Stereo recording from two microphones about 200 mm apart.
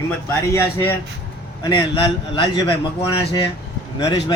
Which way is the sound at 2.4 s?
20° left (ahead or behind).